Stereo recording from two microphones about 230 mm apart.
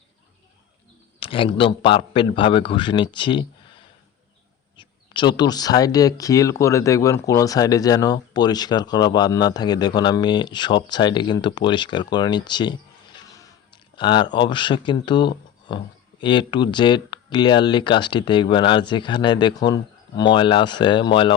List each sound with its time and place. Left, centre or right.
1.2 s speech: left
4.8 s a sound: left
5.4 s speech: centre
13.1 s squish: centre
13.9 s speech: centre